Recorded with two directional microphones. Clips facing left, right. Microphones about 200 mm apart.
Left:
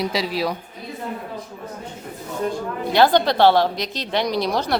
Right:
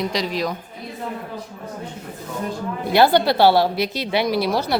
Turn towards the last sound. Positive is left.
turn(degrees=-5)  # may be behind; listen again after turning